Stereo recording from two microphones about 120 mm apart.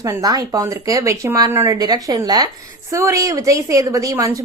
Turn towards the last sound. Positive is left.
turn(degrees=-25)  # may be behind; listen again after turning